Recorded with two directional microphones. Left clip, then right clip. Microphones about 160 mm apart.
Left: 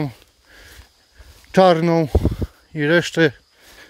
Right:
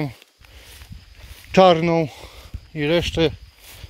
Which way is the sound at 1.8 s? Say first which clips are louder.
Left 3 dB; 35° left (ahead or behind).